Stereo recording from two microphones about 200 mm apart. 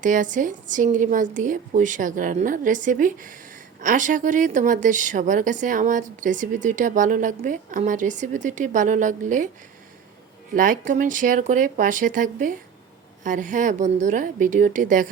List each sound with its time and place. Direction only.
0.0 s a woman's voice: 40° right (ahead or behind)
10.5 s a woman's voice: 40° right (ahead or behind)